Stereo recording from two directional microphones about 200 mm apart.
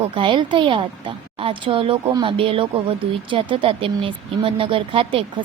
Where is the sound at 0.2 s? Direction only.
25° right (ahead or behind).